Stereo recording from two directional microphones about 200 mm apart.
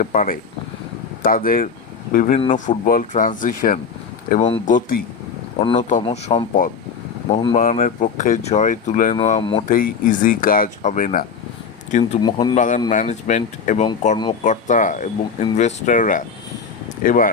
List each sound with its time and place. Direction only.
0.0 s speech: 40° left (ahead or behind)
4.3 s speech: 30° left (ahead or behind)
4.6 s speech: 40° left (ahead or behind)
9.6 s speech: 45° left (ahead or behind)
12.2 s speech: 20° left (ahead or behind)
12.5 s speech: 40° left (ahead or behind)